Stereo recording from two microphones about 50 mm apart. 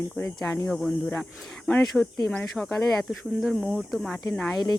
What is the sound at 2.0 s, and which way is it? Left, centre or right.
Speech, centre.